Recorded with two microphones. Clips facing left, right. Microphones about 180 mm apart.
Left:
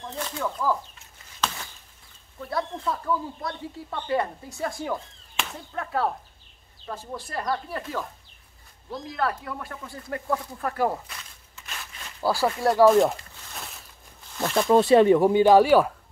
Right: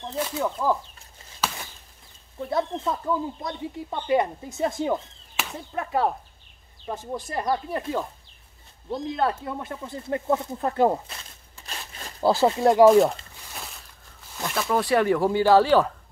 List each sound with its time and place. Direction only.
0.4 s speech: 20° right (ahead or behind)
2.4 s speech: 20° right (ahead or behind)
5.3 s whip: 5° right (ahead or behind)
5.7 s whip: 15° right (ahead or behind)
6.9 s speech: 20° right (ahead or behind); by 12.2 s 35° right (ahead or behind)
12.2 s speech: 25° right (ahead or behind)
12.9 s crumpling: centre (ahead or behind)
14.6 s speech: 25° left (ahead or behind)